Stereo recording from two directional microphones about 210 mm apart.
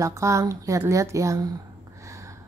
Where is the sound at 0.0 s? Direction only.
15° right (ahead or behind).